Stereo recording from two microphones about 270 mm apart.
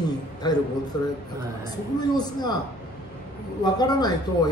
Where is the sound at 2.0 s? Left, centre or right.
Centre.